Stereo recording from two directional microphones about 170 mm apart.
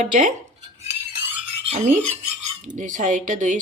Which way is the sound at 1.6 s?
40° right (ahead or behind).